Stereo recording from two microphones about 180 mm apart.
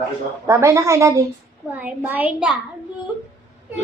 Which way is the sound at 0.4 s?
15° right (ahead or behind).